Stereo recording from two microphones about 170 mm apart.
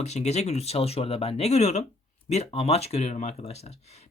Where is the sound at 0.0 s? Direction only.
40° left (ahead or behind).